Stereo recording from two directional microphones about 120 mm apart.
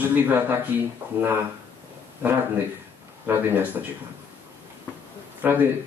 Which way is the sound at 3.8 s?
20° right (ahead or behind).